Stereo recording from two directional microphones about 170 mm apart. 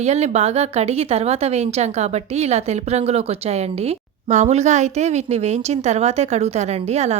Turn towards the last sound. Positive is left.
turn(degrees=-40)  # may be behind; listen again after turning